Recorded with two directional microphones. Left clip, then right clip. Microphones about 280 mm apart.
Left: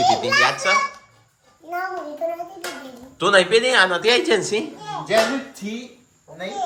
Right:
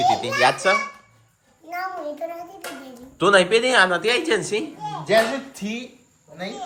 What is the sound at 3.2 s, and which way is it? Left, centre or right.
A woman's voice, centre.